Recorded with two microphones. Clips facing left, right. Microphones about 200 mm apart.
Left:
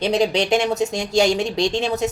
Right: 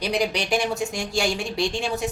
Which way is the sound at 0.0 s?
25° left (ahead or behind).